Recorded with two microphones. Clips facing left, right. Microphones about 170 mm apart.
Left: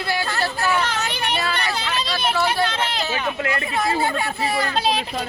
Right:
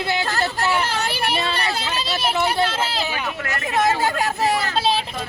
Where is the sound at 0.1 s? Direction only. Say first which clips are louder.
Left 1 dB; 20° right (ahead or behind).